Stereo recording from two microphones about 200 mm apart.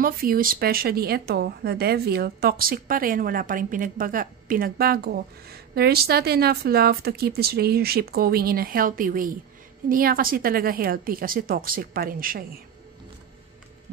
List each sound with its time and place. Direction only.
0.0 s speech: 45° right (ahead or behind)